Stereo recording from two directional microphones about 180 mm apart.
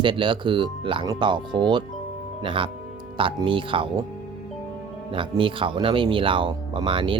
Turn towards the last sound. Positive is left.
turn(degrees=-30)  # may be behind; listen again after turning